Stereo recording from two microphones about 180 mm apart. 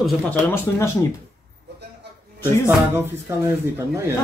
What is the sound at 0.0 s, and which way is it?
Speech, 10° left (ahead or behind).